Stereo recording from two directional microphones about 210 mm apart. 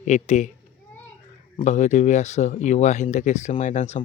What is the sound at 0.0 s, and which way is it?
Speech, 35° left (ahead or behind).